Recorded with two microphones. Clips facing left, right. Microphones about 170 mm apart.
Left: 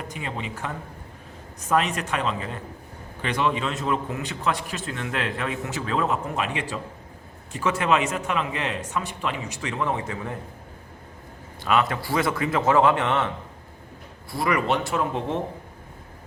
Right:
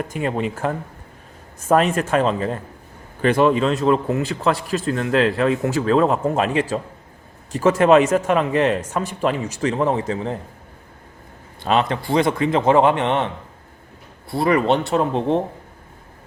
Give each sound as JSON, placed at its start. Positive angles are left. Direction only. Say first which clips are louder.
{"t": 0.1, "sound": "speech", "louder": "right 10 dB", "side_deg": -50}
{"t": 11.6, "sound": "a man's voice", "louder": "right 3 dB", "side_deg": -30}
{"t": 14.3, "sound": "speech", "louder": "right 6 dB", "side_deg": -30}